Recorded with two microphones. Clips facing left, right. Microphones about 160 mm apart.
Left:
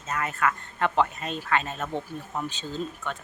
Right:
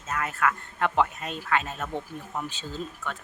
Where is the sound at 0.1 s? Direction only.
Centre (ahead or behind).